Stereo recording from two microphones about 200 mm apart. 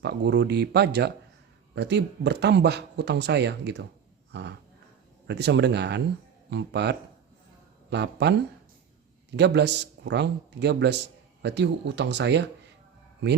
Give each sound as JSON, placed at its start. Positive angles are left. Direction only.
{"t": 0.0, "sound": "a man's voice", "side_deg": -55}
{"t": 4.3, "sound": "a sound", "side_deg": -60}
{"t": 5.3, "sound": "a man's voice", "side_deg": -60}